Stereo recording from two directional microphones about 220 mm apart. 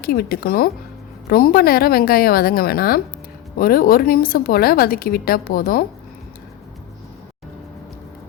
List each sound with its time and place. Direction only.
0.0 s a woman's voice: 45° left (ahead or behind)